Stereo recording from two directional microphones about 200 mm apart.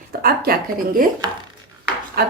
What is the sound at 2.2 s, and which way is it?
Speech, 50° right (ahead or behind).